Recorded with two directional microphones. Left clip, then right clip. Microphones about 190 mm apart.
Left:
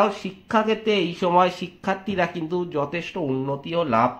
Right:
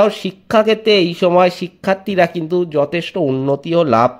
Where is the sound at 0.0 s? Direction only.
50° right (ahead or behind).